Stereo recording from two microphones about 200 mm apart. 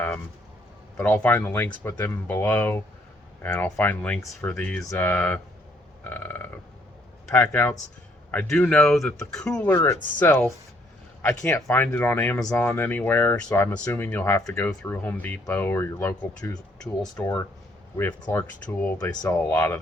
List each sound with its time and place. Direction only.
0.9 s speech: 10° left (ahead or behind)
17.9 s speech: 15° left (ahead or behind)
18.9 s speech: 20° left (ahead or behind)